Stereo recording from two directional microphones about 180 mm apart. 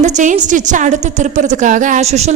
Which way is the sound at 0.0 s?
45° right (ahead or behind).